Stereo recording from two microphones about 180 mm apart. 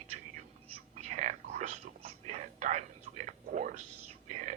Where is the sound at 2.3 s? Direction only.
40° right (ahead or behind).